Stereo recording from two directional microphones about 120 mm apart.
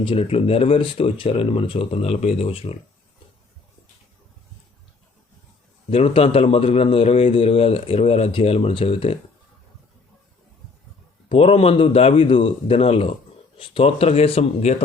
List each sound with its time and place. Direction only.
0.0 s a man's voice: 50° left (ahead or behind)
5.9 s a man's voice: 55° left (ahead or behind)
11.3 s a man's voice: 55° left (ahead or behind)